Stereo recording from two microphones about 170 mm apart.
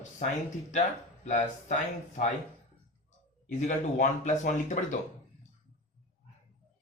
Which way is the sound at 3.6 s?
45° left (ahead or behind).